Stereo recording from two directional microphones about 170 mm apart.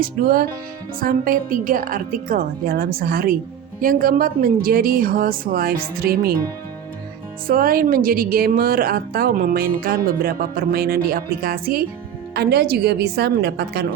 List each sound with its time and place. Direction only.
0.0 s speech: 60° right (ahead or behind)
7.4 s speech: 60° right (ahead or behind)
12.3 s a woman's voice: 75° right (ahead or behind)